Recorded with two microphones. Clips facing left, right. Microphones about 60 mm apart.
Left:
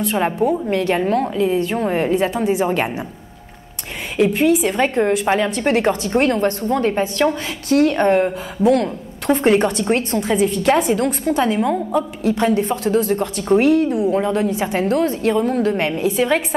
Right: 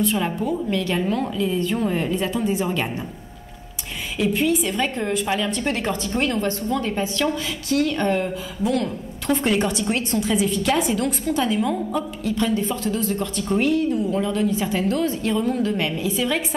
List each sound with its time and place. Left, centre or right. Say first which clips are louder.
0.0 s a woman's voice: left 4 dB; left
4.3 s a woman's voice: left 2 dB; left
4.7 s a woman's voice: left 6 dB; left
9.6 s a woman's voice: left 5 dB; left